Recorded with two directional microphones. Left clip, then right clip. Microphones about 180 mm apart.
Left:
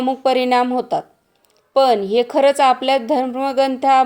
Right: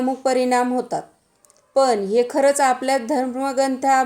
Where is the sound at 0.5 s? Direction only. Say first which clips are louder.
Left 3 dB; 15° left (ahead or behind).